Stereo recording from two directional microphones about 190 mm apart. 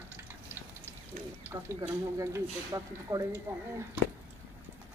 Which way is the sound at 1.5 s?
15° right (ahead or behind).